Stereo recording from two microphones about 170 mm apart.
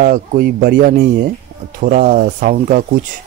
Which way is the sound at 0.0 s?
50° right (ahead or behind).